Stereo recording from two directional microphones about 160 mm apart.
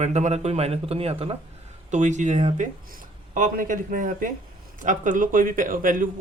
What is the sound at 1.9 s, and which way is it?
A man's voice, 50° right (ahead or behind).